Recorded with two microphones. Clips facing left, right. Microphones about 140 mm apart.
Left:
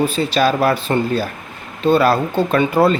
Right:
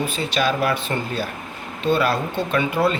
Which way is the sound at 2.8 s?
45° left (ahead or behind).